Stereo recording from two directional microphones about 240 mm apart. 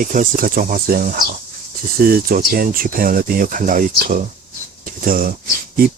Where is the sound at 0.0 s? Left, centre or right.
Right.